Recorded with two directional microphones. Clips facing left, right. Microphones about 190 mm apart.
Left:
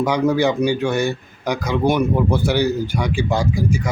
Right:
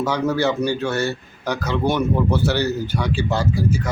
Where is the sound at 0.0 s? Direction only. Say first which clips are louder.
Left 3 dB; 15° left (ahead or behind).